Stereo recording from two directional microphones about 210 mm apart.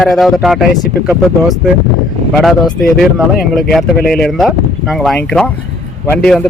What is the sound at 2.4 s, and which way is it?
Speech, centre (ahead or behind).